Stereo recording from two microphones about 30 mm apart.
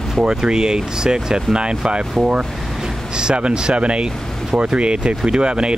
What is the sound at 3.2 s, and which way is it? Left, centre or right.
Speech, right.